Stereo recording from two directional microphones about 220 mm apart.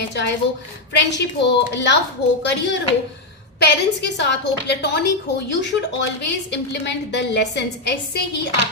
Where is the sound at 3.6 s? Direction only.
50° left (ahead or behind).